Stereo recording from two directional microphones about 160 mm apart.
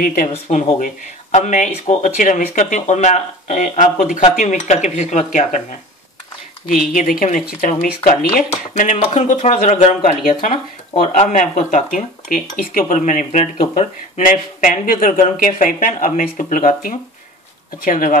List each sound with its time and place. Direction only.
0.0 s speech: 60° left (ahead or behind)
6.9 s speech: 55° left (ahead or behind)
8.7 s speech: 50° left (ahead or behind)